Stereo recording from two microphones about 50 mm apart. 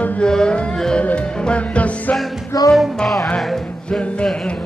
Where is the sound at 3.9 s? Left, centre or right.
Left.